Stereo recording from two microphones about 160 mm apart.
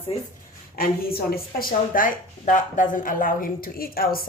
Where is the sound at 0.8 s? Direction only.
70° left (ahead or behind).